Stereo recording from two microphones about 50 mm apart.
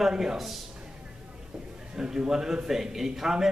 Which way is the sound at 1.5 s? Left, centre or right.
Centre.